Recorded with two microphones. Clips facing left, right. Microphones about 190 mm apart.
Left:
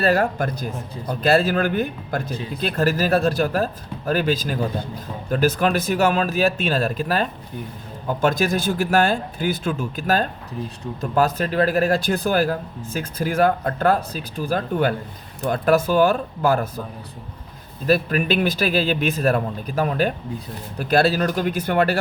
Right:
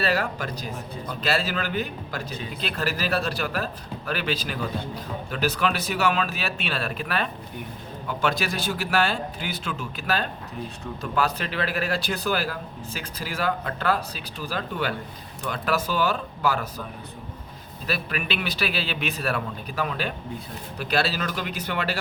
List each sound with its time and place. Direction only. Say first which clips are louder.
0.0 s speech: left 6 dB; 50° left (ahead or behind)
17.8 s speech: left 10 dB; 45° left (ahead or behind)